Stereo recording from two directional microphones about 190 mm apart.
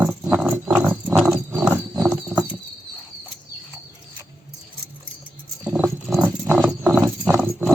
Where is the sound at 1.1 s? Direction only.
Centre (ahead or behind).